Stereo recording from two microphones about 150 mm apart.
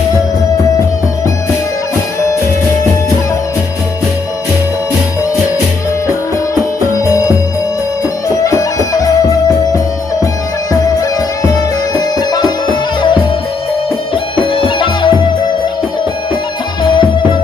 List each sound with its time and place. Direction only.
7.1 s music: 20° left (ahead or behind)
14.3 s music: 35° left (ahead or behind)
16.8 s music: 35° left (ahead or behind)